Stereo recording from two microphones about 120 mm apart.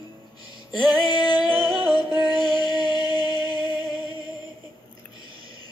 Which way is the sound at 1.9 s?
35° left (ahead or behind).